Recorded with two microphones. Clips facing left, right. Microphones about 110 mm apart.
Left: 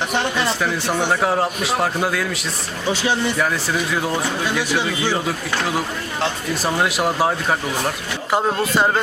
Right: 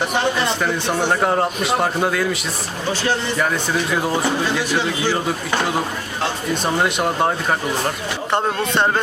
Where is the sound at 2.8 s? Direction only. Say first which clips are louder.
Left 1 dB; 10° left (ahead or behind).